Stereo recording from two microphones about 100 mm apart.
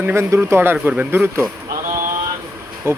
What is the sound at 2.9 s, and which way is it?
Speech, 25° right (ahead or behind).